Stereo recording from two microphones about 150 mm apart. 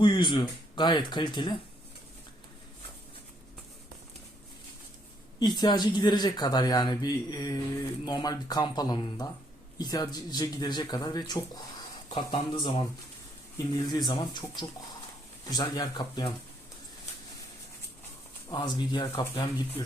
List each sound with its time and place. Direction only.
0.0 s speech: 35° left (ahead or behind)
5.5 s a man's voice: 30° left (ahead or behind)
13.9 s a man's voice: 30° left (ahead or behind)
18.5 s a man's voice: 30° left (ahead or behind)